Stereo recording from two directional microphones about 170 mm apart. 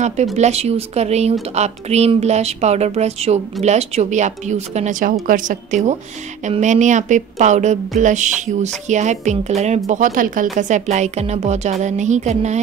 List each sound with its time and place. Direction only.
0.4 s a woman's voice: 40° right (ahead or behind)